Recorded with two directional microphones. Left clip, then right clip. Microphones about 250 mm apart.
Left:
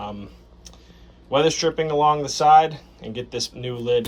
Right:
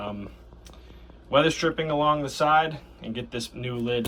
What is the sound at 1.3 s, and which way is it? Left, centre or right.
Speech, centre.